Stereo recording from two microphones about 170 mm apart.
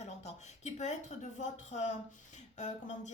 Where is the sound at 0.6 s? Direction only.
45° left (ahead or behind).